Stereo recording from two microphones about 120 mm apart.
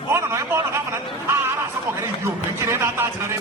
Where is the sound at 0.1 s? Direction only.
25° right (ahead or behind).